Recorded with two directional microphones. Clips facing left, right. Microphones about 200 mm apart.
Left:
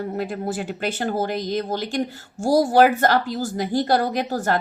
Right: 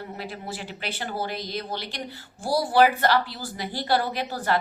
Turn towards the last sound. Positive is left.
turn(degrees=45)  # may be behind; listen again after turning